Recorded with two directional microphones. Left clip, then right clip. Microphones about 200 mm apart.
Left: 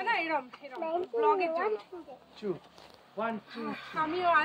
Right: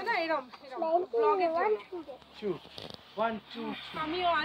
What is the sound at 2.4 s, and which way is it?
Speech, 30° right (ahead or behind).